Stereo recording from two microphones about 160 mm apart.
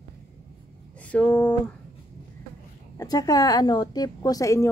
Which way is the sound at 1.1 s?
5° left (ahead or behind).